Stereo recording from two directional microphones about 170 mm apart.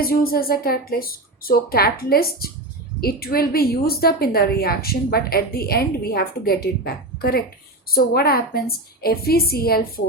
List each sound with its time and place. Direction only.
0.0 s a woman's voice: 60° left (ahead or behind)